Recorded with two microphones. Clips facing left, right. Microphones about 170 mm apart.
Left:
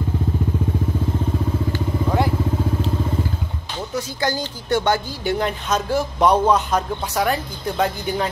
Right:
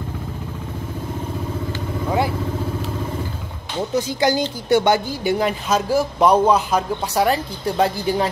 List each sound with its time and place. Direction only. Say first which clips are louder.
2.0 s vehicle: right 1 dB; 5° right (ahead or behind)
3.9 s a man's voice: right 5 dB; 15° right (ahead or behind)
7.2 s a woman's voice: right 3 dB; 30° right (ahead or behind)